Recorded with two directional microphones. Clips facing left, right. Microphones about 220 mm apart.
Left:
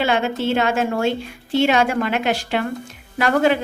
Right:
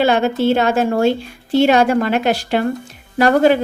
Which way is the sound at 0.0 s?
40° right (ahead or behind).